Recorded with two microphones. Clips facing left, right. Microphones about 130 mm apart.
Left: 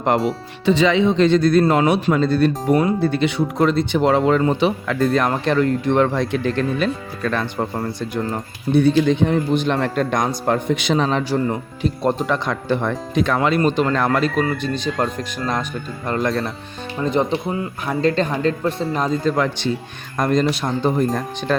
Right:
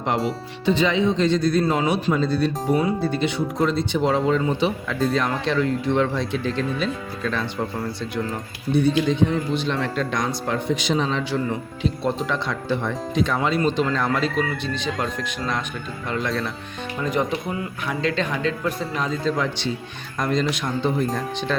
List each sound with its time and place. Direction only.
0.6 s speech: 85° left; by 11.2 s 65° left (ahead or behind)
11.2 s speech: 45° left (ahead or behind)
17.0 s speech: 30° left (ahead or behind)
18.0 s speech: 40° left (ahead or behind)
19.2 s speech: 55° left (ahead or behind)